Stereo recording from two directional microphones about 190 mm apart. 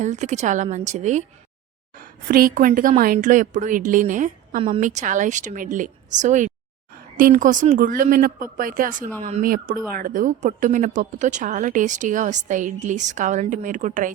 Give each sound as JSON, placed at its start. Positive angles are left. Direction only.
{"t": 0.0, "sound": "a woman's voice", "side_deg": -40}